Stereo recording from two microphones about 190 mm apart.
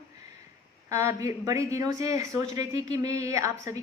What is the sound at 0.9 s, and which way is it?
A woman's voice, 15° right (ahead or behind).